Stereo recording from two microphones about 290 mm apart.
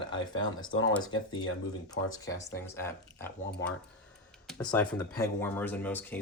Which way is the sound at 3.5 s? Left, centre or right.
Left.